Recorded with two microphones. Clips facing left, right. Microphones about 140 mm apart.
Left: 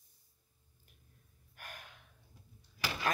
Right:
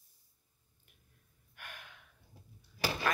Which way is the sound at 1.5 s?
40° left (ahead or behind).